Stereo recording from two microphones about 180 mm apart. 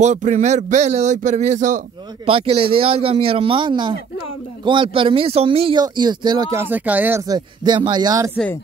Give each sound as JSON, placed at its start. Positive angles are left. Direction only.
{"t": 0.0, "sound": "speech", "side_deg": -40}
{"t": 2.2, "sound": "speech", "side_deg": -30}